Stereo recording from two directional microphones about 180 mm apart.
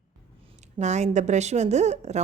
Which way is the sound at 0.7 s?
40° right (ahead or behind).